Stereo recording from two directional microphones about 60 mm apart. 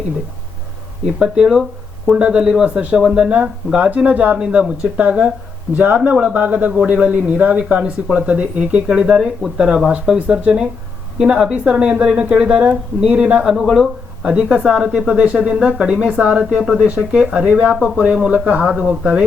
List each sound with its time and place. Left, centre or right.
1.2 s speech: centre
3.2 s speech: right